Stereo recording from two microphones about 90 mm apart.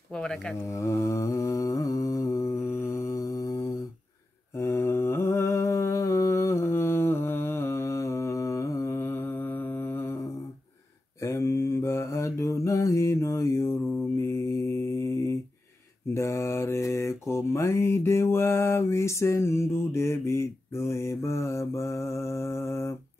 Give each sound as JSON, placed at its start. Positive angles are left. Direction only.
{"t": 0.1, "sound": "speech", "side_deg": 10}
{"t": 0.7, "sound": "humming", "side_deg": 35}
{"t": 2.5, "sound": "mantra", "side_deg": 30}
{"t": 11.1, "sound": "mantra", "side_deg": 30}
{"t": 17.3, "sound": "a sound", "side_deg": 30}